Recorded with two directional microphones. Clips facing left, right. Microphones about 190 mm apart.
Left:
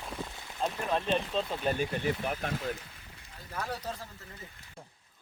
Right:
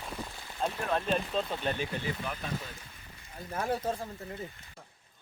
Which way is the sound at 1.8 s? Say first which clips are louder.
Left 4 dB; 50° left (ahead or behind).